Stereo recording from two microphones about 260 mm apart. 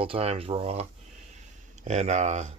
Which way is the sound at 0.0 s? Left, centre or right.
Right.